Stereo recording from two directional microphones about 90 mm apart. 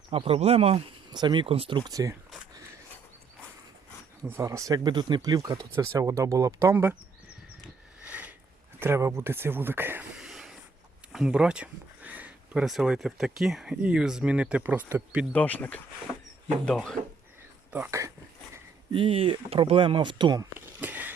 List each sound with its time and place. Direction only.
0.1 s speech: 90° right
1.1 s speech: 55° right (ahead or behind); by 1.9 s 75° right (ahead or behind)
1.9 s speech: 40° right (ahead or behind)
4.3 s speech: 35° right (ahead or behind)
8.0 s a sound: 15° right (ahead or behind)
8.8 s speech: 30° right (ahead or behind)
10.2 s a sound: 5° right (ahead or behind)
12.6 s speech: 5° right (ahead or behind); by 15.2 s 20° right (ahead or behind)
15.3 s speech: 15° left (ahead or behind)
17.7 s speech: 15° right (ahead or behind)
18.9 s speech: 75° right (ahead or behind); by 20.4 s 55° right (ahead or behind)
20.5 s a sound: 20° right (ahead or behind)